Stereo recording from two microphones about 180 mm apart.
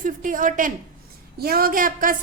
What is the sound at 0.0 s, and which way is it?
A woman's voice, 50° right (ahead or behind).